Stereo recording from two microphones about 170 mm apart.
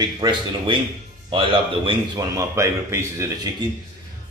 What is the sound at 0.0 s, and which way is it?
A man's voice, 25° right (ahead or behind).